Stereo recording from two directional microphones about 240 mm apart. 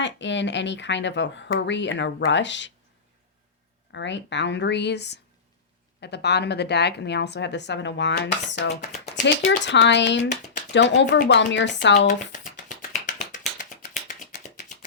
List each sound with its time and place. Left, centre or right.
0.0 s a woman's voice: left
3.9 s a woman's voice: left
8.8 s a sound: left
9.2 s a woman's voice: left
12.3 s finger snapping: left
14.1 s a sound: left